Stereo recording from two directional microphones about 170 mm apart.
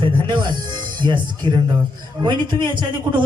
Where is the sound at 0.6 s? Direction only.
25° right (ahead or behind).